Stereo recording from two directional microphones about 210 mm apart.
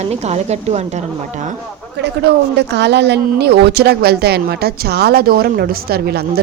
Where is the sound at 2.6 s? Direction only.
55° right (ahead or behind).